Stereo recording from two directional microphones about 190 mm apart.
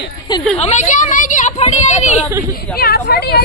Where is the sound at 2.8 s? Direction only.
55° left (ahead or behind).